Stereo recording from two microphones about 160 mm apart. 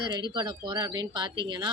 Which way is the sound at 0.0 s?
30° right (ahead or behind).